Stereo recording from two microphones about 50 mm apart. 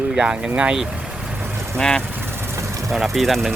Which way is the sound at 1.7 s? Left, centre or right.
Centre.